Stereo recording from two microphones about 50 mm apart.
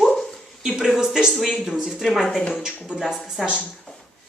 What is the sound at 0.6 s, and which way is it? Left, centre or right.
Speech, centre.